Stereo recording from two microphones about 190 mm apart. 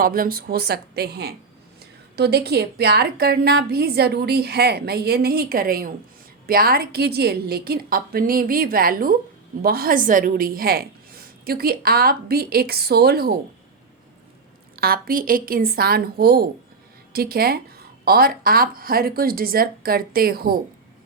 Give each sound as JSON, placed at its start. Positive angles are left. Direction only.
{"t": 0.0, "sound": "a woman's voice", "side_deg": -50}
{"t": 14.8, "sound": "a woman's voice", "side_deg": -50}